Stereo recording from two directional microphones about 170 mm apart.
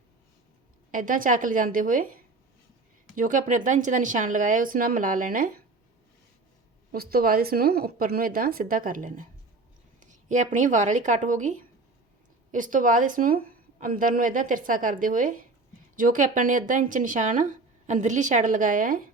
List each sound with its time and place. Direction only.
0.9 s speech: 50° right (ahead or behind)
3.2 s speech: 50° right (ahead or behind)
6.9 s speech: 60° right (ahead or behind)